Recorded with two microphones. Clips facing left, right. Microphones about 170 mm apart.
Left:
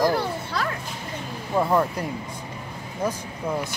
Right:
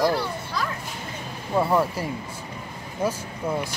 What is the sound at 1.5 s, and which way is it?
Speech, 5° right (ahead or behind).